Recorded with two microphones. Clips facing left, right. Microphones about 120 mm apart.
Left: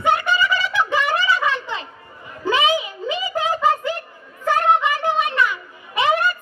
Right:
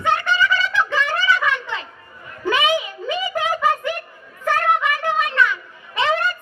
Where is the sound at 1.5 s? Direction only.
25° left (ahead or behind).